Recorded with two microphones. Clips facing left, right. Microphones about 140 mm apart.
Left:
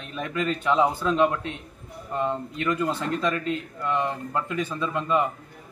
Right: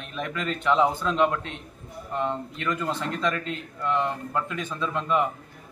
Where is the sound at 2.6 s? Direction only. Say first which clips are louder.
Left 3 dB; 20° left (ahead or behind).